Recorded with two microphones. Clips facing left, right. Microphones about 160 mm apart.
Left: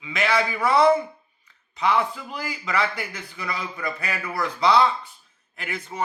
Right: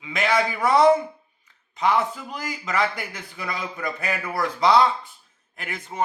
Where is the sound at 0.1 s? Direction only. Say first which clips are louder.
Right 1 dB; 50° right (ahead or behind).